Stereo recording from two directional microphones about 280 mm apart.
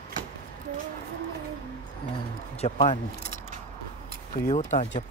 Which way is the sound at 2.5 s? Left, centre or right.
Left.